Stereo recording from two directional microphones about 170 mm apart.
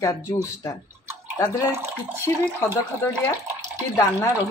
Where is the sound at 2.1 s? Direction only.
15° right (ahead or behind).